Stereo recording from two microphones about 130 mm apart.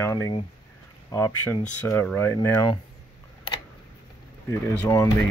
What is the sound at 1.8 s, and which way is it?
Speech, 10° left (ahead or behind).